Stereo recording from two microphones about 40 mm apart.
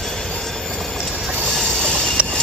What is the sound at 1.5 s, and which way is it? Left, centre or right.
Train, centre.